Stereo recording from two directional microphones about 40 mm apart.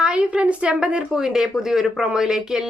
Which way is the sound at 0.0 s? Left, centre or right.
Right.